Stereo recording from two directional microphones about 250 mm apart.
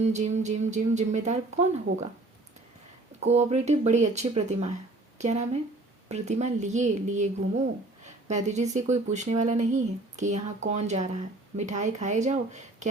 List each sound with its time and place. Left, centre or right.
0.0 s speech: right
3.2 s speech: right